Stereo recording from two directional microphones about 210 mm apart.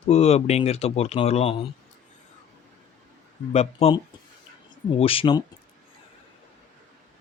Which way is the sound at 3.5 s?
30° left (ahead or behind).